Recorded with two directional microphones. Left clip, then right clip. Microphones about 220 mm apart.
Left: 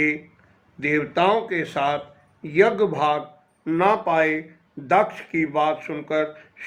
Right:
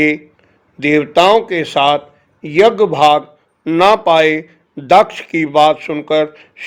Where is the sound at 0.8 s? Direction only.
40° right (ahead or behind).